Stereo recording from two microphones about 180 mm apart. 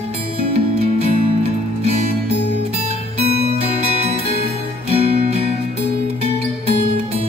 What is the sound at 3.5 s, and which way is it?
Music, 35° right (ahead or behind).